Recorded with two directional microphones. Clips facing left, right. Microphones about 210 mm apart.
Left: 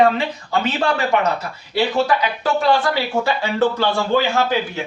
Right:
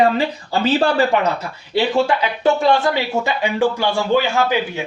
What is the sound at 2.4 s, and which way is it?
Speech, 20° right (ahead or behind).